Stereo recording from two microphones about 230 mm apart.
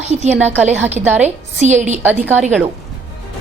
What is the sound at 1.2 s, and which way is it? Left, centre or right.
Speech, right.